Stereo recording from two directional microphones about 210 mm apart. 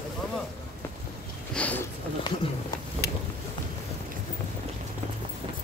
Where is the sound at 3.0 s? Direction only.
45° left (ahead or behind).